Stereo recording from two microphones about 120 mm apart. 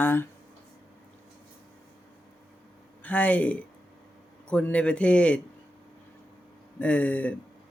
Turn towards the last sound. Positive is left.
turn(degrees=10)  # may be behind; listen again after turning